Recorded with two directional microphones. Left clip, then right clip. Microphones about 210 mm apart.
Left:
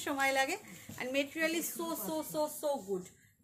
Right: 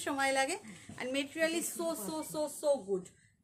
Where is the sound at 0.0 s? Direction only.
15° right (ahead or behind).